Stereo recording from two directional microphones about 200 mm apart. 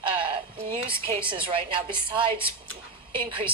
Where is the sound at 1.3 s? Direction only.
25° right (ahead or behind).